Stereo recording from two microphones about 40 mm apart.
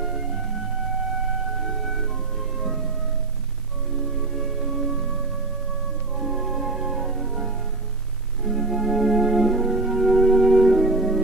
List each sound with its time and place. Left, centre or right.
0.0 s music: centre
4.4 s music: centre
6.1 s music: centre